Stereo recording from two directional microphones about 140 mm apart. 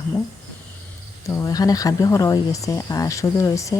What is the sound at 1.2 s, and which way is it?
Speech, 25° left (ahead or behind).